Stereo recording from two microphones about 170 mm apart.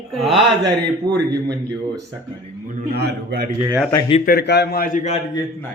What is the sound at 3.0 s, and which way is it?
Speech, 70° right (ahead or behind).